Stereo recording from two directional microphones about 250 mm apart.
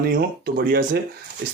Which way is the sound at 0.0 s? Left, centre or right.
Right.